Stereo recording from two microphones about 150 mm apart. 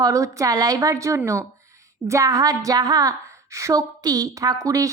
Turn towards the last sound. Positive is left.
turn(degrees=-20)  # may be behind; listen again after turning